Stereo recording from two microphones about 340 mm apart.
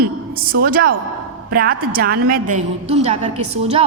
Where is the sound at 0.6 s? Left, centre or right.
Right.